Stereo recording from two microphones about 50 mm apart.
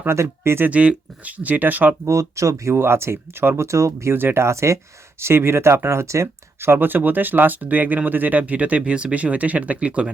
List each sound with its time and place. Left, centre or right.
0.1 s speech: right
0.7 s speech: right
2.0 s speech: right
2.7 s speech: right
4.1 s speech: right
4.4 s speech: right
5.2 s speech: right